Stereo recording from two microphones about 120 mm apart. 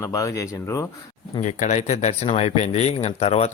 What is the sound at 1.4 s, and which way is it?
Speech, 80° left.